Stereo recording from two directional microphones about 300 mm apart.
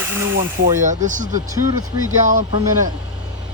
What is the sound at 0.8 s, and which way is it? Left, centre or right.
Speech, right.